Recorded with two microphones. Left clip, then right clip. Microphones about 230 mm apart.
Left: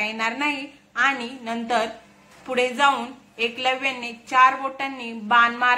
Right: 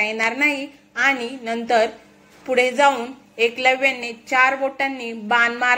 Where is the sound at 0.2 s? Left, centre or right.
Left.